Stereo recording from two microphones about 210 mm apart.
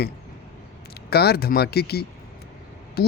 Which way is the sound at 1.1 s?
50° left (ahead or behind).